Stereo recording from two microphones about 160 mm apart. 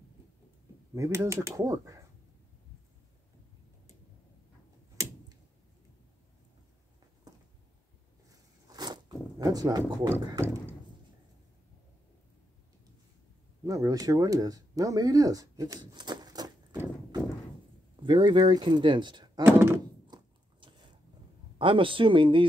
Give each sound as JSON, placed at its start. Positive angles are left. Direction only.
{"t": 0.9, "sound": "speech", "side_deg": -20}
{"t": 8.6, "sound": "zipper", "side_deg": -25}
{"t": 10.4, "sound": "a sound", "side_deg": -15}
{"t": 13.7, "sound": "speech", "side_deg": -20}
{"t": 18.0, "sound": "speech", "side_deg": -30}
{"t": 19.4, "sound": "speech", "side_deg": -15}
{"t": 20.1, "sound": "biting", "side_deg": -30}
{"t": 21.5, "sound": "speech", "side_deg": -30}